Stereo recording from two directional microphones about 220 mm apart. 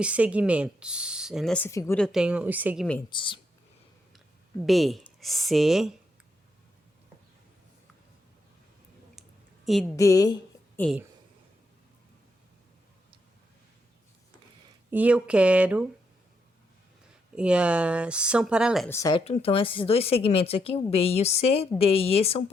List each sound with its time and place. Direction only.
0.0 s speech: 5° right (ahead or behind); by 2.0 s 10° left (ahead or behind)
2.1 s speech: 5° right (ahead or behind)
3.1 s speech: 20° left (ahead or behind)
4.6 s speech: centre (ahead or behind)
9.6 s a woman's voice: centre (ahead or behind)
9.9 s a woman's voice: 15° left (ahead or behind)
10.8 s speech: centre (ahead or behind)
14.8 s speech: 5° right (ahead or behind)
17.3 s speech: 5° right (ahead or behind)
18.9 s a woman's voice: 15° left (ahead or behind)
19.2 s speech: 25° left (ahead or behind)